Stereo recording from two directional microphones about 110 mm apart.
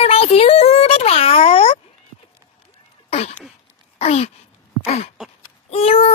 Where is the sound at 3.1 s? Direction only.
75° left (ahead or behind).